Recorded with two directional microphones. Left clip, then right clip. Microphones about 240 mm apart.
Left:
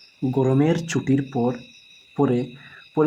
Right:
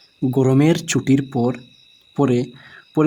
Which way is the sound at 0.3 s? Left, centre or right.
Right.